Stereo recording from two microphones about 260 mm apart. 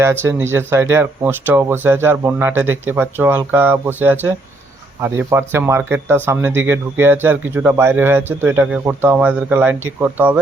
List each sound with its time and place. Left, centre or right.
0.0 s speech: centre